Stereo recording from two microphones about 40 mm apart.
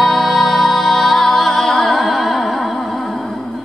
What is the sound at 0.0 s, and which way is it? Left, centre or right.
Music, centre.